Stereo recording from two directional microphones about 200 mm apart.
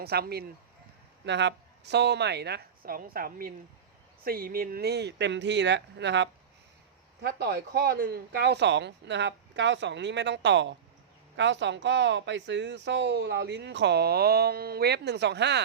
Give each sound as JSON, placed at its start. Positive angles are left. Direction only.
{"t": 0.0, "sound": "speech", "side_deg": -50}